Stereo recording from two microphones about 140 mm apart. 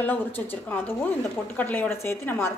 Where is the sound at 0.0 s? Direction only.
10° left (ahead or behind).